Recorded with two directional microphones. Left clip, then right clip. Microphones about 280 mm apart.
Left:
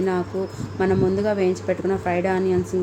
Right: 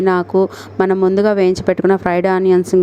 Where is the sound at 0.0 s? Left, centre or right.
Right.